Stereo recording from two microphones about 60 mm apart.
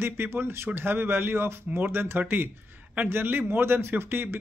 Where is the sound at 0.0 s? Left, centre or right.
Right.